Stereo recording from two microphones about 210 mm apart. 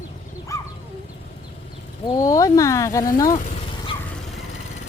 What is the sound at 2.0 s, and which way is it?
Speech, 15° left (ahead or behind).